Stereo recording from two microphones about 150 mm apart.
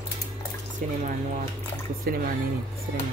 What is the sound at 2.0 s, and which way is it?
Speech, 75° right (ahead or behind).